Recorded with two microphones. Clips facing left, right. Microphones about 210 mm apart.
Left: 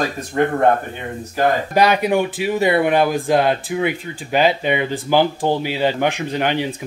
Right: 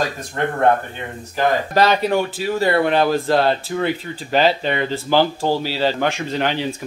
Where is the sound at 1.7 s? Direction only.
15° left (ahead or behind).